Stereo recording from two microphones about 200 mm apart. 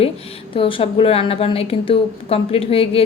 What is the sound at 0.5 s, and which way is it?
A woman's voice, 25° left (ahead or behind).